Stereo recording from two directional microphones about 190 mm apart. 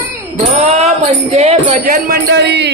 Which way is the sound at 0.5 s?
35° right (ahead or behind).